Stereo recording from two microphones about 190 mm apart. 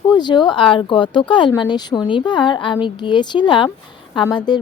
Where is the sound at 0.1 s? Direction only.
25° left (ahead or behind).